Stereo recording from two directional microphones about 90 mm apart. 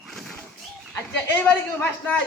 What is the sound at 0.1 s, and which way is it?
Dog, 5° left (ahead or behind).